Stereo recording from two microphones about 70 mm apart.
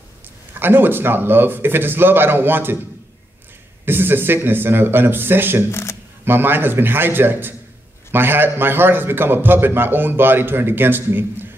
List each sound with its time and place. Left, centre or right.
0.6 s a man's voice: right
3.8 s a man's voice: right
5.7 s speech: left
6.2 s a man's voice: right